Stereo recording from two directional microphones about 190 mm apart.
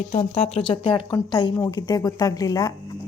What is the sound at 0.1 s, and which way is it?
Speech, 30° left (ahead or behind).